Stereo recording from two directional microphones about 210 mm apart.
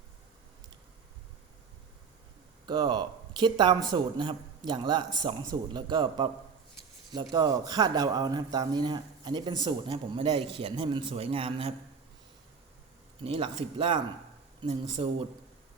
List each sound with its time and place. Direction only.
2.6 s a man's voice: 20° right (ahead or behind)
13.2 s a man's voice: 25° right (ahead or behind)